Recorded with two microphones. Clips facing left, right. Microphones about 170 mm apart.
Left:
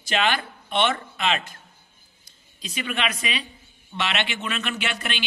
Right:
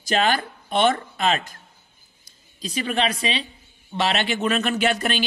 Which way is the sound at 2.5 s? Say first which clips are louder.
Right 5 dB; 35° right (ahead or behind).